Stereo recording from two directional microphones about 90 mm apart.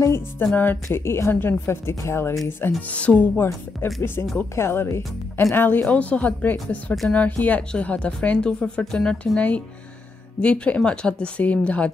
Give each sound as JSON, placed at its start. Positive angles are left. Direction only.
{"t": 0.6, "sound": "speech", "side_deg": 25}
{"t": 2.9, "sound": "speech", "side_deg": 15}
{"t": 3.4, "sound": "speech", "side_deg": 30}